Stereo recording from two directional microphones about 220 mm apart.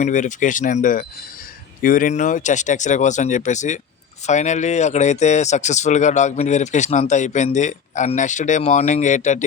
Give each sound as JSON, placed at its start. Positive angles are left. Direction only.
{"t": 0.0, "sound": "speech", "side_deg": 35}